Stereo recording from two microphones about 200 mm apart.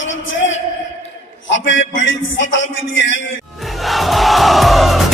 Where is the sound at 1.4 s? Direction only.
65° left (ahead or behind).